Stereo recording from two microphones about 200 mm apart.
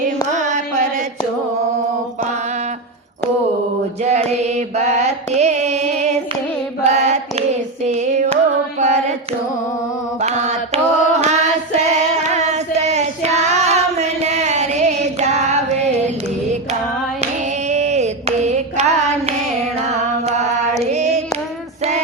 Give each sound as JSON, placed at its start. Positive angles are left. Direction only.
{"t": 0.3, "sound": "carnatic music", "side_deg": -40}
{"t": 4.0, "sound": "music", "side_deg": -35}
{"t": 6.8, "sound": "carnatic music", "side_deg": -35}
{"t": 7.9, "sound": "music", "side_deg": -35}
{"t": 10.2, "sound": "music", "side_deg": -35}
{"t": 17.7, "sound": "carnatic music", "side_deg": -35}
{"t": 20.2, "sound": "a sound", "side_deg": -35}